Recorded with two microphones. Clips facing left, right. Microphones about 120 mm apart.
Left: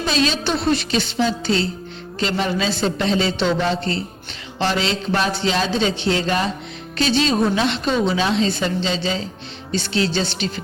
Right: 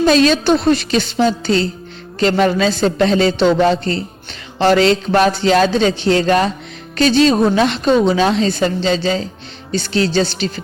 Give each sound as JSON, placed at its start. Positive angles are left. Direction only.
{"t": 0.0, "sound": "a woman's voice", "side_deg": -50}
{"t": 2.1, "sound": "a woman's voice", "side_deg": -55}
{"t": 7.0, "sound": "a woman's voice", "side_deg": -45}